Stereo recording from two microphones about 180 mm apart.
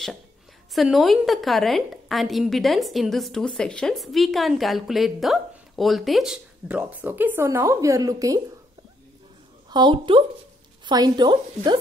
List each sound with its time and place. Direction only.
0.7 s a woman's voice: centre (ahead or behind); by 8.4 s 20° right (ahead or behind)
9.7 s speech: 25° right (ahead or behind)